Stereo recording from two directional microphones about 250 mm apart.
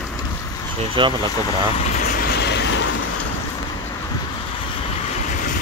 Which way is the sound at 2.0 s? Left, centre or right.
Left.